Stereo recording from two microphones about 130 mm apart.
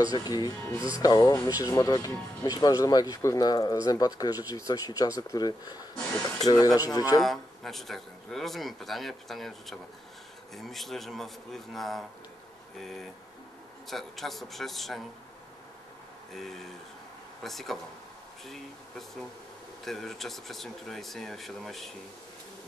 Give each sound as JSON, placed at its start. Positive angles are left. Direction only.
{"t": 0.0, "sound": "speech", "side_deg": 30}
{"t": 7.2, "sound": "speech", "side_deg": 0}
{"t": 16.3, "sound": "speech", "side_deg": 0}